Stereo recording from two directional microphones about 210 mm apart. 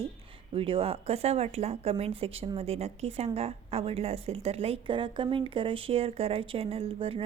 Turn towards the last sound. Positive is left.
turn(degrees=-25)  # may be behind; listen again after turning